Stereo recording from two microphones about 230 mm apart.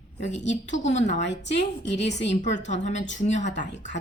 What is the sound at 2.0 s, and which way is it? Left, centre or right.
A woman's voice, left.